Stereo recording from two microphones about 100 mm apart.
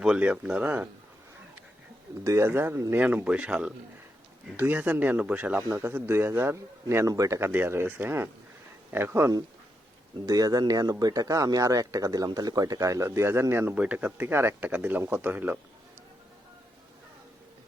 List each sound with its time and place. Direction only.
0.0 s speech: 10° right (ahead or behind)
2.2 s a man's voice: 30° right (ahead or behind)